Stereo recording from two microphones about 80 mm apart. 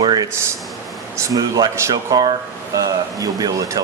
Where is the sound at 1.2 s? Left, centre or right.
Right.